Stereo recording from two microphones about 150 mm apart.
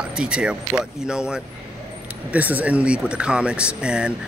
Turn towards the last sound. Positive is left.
turn(degrees=-5)  # may be behind; listen again after turning